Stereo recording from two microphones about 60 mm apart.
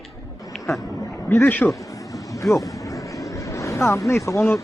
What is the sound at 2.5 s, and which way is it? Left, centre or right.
Vehicle, left.